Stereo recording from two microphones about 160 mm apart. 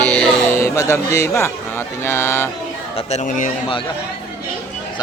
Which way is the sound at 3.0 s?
45° left (ahead or behind).